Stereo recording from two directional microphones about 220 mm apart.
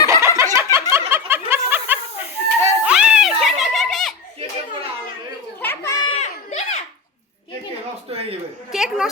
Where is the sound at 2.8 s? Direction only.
5° right (ahead or behind).